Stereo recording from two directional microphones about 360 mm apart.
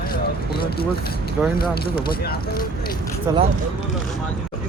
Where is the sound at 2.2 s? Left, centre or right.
Left.